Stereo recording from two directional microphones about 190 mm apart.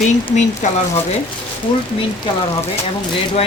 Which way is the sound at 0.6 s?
40° left (ahead or behind).